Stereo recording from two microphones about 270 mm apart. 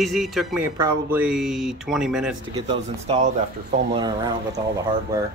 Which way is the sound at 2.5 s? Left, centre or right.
Right.